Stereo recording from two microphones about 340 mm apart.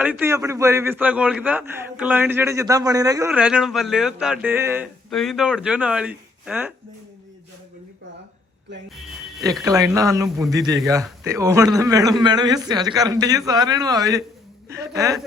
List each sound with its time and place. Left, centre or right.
0.0 s a man's voice: centre
9.0 s speech: centre